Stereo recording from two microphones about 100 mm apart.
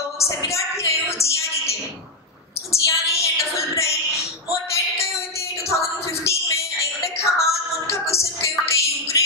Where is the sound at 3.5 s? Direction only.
30° left (ahead or behind).